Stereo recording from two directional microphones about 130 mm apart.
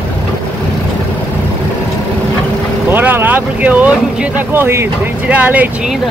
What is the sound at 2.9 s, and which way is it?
Speech, 15° right (ahead or behind).